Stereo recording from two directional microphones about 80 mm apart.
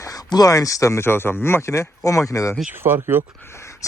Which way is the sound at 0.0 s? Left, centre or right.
Left.